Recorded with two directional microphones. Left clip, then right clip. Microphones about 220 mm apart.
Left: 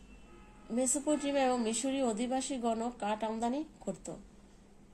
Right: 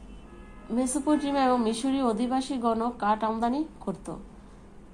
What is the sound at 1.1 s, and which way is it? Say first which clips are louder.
A woman's voice: right 7 dB; 25° left (ahead or behind).